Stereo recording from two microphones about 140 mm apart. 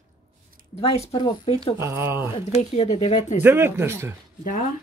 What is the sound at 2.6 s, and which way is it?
Speech, 50° left (ahead or behind).